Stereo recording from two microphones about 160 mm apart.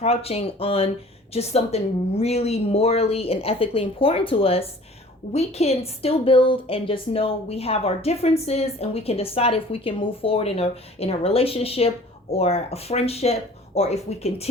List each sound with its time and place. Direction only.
0.0 s speech: 40° left (ahead or behind)